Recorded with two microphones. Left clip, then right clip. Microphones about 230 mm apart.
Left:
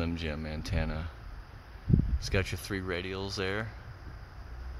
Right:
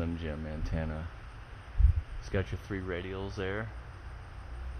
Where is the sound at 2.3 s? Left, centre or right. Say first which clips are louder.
Left 3 dB; left.